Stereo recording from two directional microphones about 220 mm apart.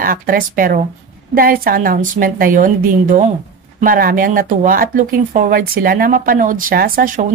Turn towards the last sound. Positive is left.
turn(degrees=-40)  # may be behind; listen again after turning